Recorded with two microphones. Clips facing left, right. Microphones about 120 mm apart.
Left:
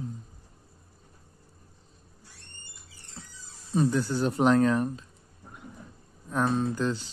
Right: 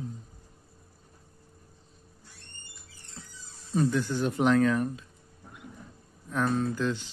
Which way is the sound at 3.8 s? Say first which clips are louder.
Left 1 dB; 35° left (ahead or behind).